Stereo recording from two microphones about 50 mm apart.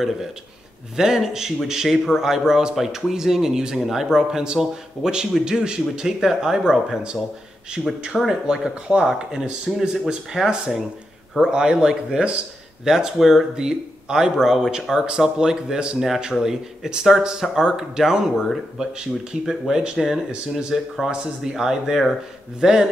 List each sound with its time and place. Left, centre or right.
0.9 s speech: centre
7.8 s speech: centre
8.2 s speech: centre